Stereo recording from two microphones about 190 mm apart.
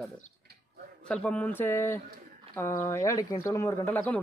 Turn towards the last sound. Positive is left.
turn(degrees=10)  # may be behind; listen again after turning